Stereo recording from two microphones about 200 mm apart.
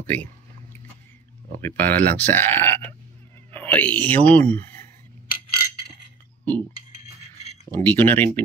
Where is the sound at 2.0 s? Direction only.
10° left (ahead or behind).